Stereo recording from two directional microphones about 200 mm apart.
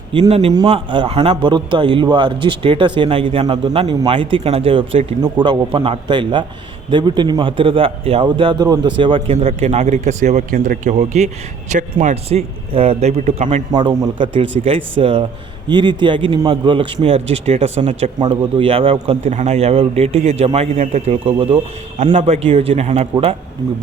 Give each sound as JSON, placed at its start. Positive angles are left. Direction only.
{"t": 0.1, "sound": "a man's voice", "side_deg": -30}
{"t": 13.7, "sound": "a man's voice", "side_deg": -20}